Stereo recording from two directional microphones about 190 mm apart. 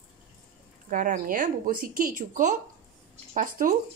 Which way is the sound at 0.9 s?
45° right (ahead or behind).